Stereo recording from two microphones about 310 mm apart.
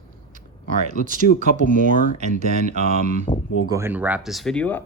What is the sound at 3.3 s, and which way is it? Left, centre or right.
Speech, centre.